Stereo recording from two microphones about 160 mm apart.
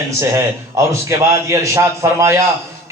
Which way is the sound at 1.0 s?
15° right (ahead or behind).